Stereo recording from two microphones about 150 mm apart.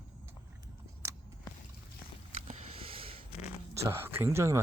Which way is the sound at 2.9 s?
40° right (ahead or behind).